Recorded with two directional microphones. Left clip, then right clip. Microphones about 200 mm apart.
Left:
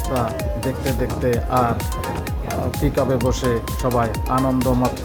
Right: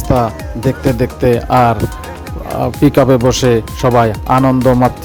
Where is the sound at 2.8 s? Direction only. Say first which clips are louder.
Right 11 dB; 40° right (ahead or behind).